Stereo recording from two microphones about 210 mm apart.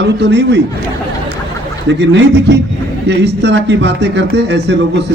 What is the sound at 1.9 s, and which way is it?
Speech, 55° right (ahead or behind).